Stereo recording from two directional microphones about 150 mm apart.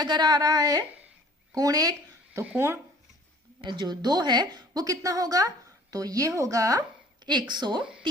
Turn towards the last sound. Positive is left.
turn(degrees=-30)  # may be behind; listen again after turning